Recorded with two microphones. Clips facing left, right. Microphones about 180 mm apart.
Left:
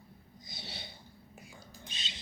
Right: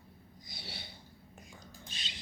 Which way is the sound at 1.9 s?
25° left (ahead or behind).